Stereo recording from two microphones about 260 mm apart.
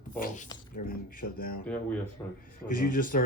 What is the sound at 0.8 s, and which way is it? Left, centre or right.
Speech, left.